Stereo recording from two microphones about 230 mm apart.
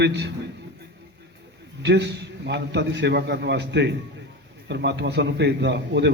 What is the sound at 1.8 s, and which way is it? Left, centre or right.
Speech, right.